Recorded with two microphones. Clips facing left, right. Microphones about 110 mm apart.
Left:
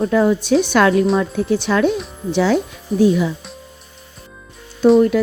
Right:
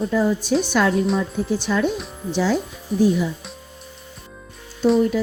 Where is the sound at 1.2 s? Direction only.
70° left (ahead or behind).